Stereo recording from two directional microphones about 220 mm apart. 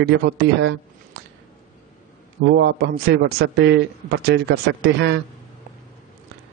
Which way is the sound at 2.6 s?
50° right (ahead or behind).